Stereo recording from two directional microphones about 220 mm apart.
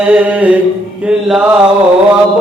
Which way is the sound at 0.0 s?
5° right (ahead or behind).